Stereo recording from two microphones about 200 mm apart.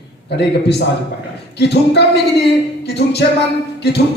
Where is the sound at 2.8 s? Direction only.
55° left (ahead or behind).